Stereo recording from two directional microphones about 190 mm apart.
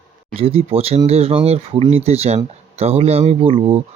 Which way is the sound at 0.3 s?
30° right (ahead or behind).